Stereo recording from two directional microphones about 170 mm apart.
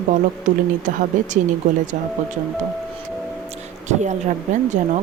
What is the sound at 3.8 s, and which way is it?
Speech, 45° right (ahead or behind).